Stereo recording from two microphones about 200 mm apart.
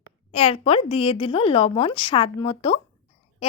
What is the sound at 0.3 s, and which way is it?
A woman's voice, 30° left (ahead or behind).